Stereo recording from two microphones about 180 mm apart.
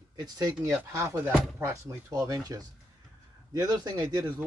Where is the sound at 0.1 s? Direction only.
20° right (ahead or behind).